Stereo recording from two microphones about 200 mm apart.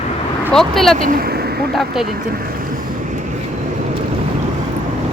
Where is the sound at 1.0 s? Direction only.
45° right (ahead or behind).